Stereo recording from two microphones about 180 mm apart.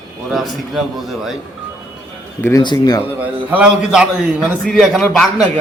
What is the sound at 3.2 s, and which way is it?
A man's voice, 10° right (ahead or behind).